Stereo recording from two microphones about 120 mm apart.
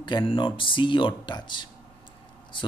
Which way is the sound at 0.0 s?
45° left (ahead or behind).